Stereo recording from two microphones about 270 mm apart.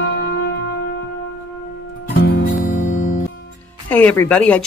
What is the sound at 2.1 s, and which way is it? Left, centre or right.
Music, left.